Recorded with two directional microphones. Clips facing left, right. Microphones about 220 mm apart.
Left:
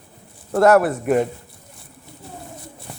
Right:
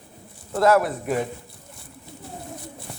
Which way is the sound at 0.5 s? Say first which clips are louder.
Left 5 dB; 65° left (ahead or behind).